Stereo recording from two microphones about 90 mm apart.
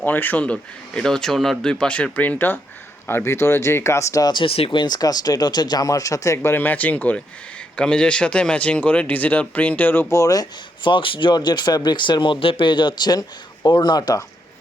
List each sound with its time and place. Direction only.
0.0 s speech: 20° left (ahead or behind); by 4.3 s 35° left (ahead or behind)
4.3 s speech: 75° left (ahead or behind); by 10.1 s 20° left (ahead or behind)
10.1 s speech: 40° left (ahead or behind)
10.8 s speech: 70° left (ahead or behind); by 14.2 s 50° left (ahead or behind)